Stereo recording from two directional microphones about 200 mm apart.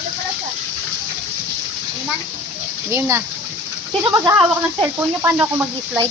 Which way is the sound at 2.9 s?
10° right (ahead or behind).